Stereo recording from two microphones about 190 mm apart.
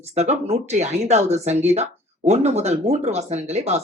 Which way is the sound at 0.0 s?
35° right (ahead or behind).